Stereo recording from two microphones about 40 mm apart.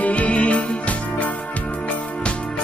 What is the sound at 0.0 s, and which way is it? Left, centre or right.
Music, left.